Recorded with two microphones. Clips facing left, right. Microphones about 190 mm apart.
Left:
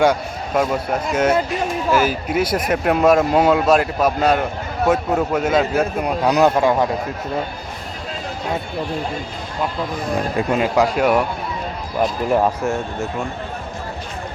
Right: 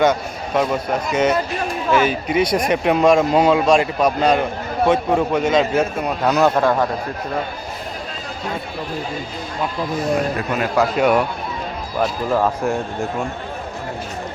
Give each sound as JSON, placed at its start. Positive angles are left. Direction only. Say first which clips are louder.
{"t": 0.0, "sound": "a man's voice", "louder": "even", "side_deg": 10}
{"t": 10.5, "sound": "a man's voice", "louder": "left 2 dB", "side_deg": 25}
{"t": 10.9, "sound": "speech", "louder": "right 1 dB", "side_deg": 5}
{"t": 12.6, "sound": "speech", "louder": "right 1 dB", "side_deg": 0}